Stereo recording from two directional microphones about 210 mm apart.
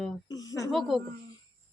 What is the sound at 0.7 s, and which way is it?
Speech, centre (ahead or behind).